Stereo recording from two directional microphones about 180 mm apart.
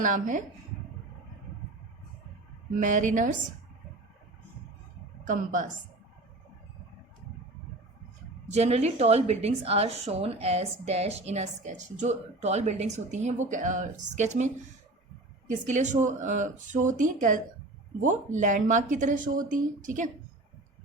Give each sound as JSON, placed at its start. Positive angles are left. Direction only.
{"t": 0.0, "sound": "speech", "side_deg": -45}
{"t": 2.7, "sound": "speech", "side_deg": -45}
{"t": 5.2, "sound": "speech", "side_deg": -45}
{"t": 8.4, "sound": "a woman's voice", "side_deg": -40}